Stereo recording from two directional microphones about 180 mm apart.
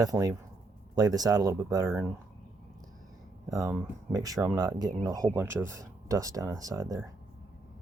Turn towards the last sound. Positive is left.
turn(degrees=-20)  # may be behind; listen again after turning